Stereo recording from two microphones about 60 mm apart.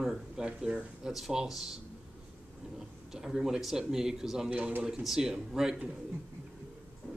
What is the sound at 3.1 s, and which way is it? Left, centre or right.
Speech, centre.